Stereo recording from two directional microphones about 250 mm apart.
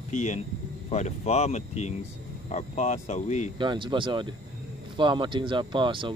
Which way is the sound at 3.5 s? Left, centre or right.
Centre.